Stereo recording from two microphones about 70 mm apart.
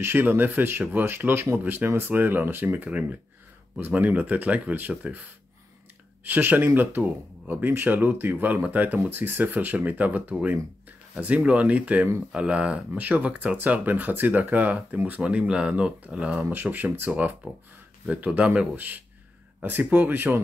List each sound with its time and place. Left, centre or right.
0.0 s speech: right